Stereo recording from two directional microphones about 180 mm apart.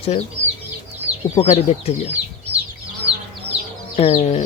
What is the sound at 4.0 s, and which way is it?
Speech, 35° left (ahead or behind).